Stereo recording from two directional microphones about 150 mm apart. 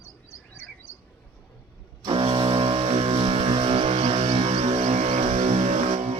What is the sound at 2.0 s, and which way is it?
Vehicle, 35° right (ahead or behind).